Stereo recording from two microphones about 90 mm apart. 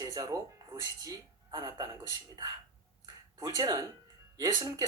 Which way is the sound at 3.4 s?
45° right (ahead or behind).